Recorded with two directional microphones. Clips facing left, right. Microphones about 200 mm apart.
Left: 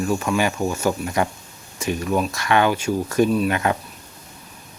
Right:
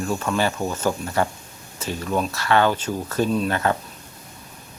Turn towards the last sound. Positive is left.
turn(degrees=15)  # may be behind; listen again after turning